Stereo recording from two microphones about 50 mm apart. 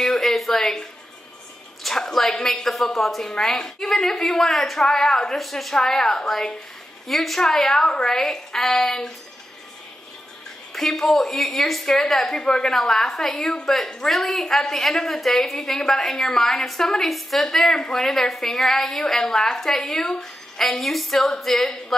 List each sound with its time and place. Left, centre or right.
0.0 s a sound: centre
1.8 s a woman's voice: centre
10.7 s a woman's voice: centre